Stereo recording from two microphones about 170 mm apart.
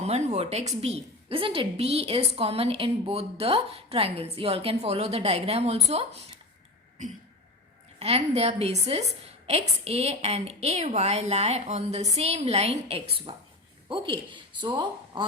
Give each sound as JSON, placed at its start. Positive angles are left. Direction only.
{"t": 0.0, "sound": "a woman's voice", "side_deg": -40}
{"t": 7.9, "sound": "a woman's voice", "side_deg": -35}